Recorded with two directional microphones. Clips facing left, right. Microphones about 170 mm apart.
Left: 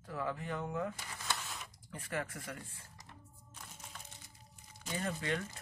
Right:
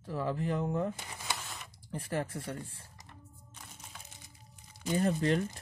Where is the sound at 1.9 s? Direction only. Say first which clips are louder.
Right 5 dB; 35° right (ahead or behind).